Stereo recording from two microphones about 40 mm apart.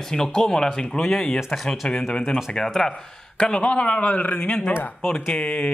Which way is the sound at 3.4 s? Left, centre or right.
Left.